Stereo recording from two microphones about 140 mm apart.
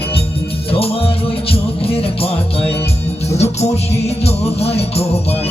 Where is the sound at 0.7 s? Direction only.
45° left (ahead or behind).